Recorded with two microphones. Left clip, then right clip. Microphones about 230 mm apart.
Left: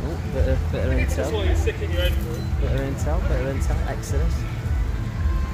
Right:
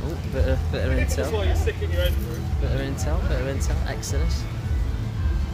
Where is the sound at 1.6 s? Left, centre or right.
Right.